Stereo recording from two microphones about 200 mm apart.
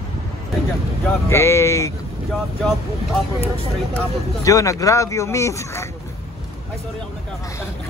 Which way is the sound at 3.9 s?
15° left (ahead or behind).